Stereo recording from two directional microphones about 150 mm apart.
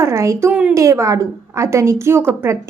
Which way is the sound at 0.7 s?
20° right (ahead or behind).